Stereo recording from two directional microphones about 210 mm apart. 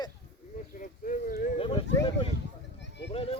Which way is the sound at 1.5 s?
25° left (ahead or behind).